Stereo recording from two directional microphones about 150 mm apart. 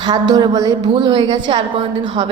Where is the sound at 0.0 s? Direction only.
30° right (ahead or behind).